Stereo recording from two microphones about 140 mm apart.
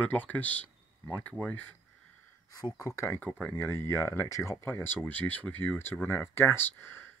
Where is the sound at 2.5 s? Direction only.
25° left (ahead or behind).